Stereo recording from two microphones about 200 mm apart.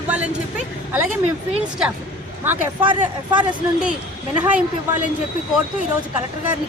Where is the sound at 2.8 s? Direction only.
25° right (ahead or behind).